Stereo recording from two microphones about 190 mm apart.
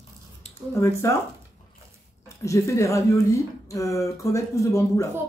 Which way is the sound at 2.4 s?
15° left (ahead or behind).